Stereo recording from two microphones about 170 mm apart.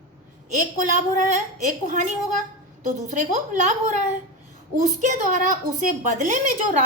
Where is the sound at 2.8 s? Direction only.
45° right (ahead or behind).